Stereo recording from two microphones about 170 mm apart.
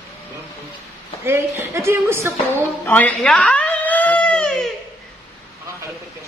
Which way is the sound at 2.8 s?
10° left (ahead or behind).